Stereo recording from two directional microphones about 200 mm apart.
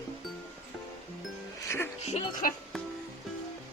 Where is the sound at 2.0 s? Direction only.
35° left (ahead or behind).